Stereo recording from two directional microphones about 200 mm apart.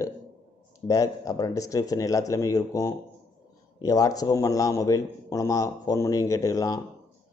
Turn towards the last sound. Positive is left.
turn(degrees=15)  # may be behind; listen again after turning